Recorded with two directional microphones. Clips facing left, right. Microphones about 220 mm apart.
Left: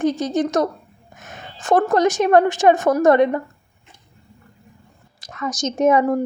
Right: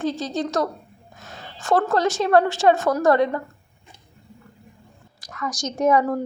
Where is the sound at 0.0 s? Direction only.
20° left (ahead or behind).